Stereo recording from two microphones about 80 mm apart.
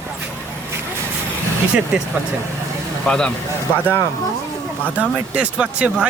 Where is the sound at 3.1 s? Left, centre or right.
Centre.